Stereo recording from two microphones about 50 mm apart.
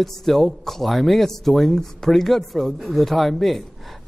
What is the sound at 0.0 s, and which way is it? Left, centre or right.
Speech, centre.